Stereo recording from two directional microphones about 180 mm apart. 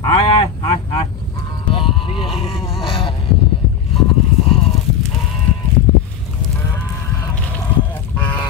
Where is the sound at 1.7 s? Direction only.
30° left (ahead or behind).